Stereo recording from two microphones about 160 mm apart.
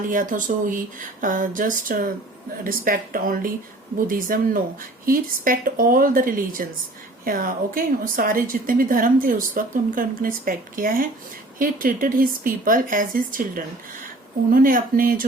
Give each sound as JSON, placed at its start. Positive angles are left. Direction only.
{"t": 0.1, "sound": "a woman's voice", "side_deg": -55}